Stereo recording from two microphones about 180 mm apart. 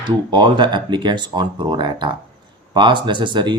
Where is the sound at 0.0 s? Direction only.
25° right (ahead or behind).